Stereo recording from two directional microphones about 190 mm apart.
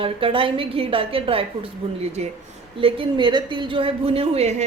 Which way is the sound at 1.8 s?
30° right (ahead or behind).